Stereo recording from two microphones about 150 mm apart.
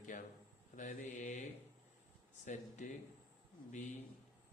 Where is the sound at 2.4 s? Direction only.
55° left (ahead or behind).